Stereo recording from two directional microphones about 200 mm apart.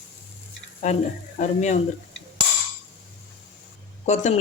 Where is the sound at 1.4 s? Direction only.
35° left (ahead or behind).